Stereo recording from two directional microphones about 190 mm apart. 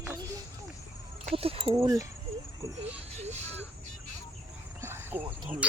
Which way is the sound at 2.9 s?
35° right (ahead or behind).